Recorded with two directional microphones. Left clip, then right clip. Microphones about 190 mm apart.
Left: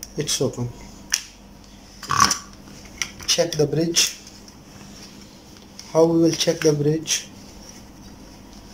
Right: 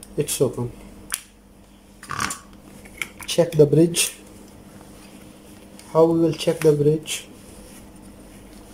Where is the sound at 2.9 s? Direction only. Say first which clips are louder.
Even; 20° right (ahead or behind).